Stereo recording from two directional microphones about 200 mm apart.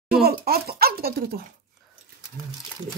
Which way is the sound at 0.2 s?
50° right (ahead or behind).